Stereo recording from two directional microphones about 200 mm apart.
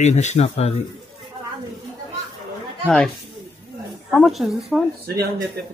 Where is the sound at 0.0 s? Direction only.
35° left (ahead or behind).